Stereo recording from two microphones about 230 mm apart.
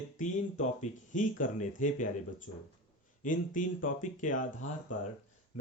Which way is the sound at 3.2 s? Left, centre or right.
Left.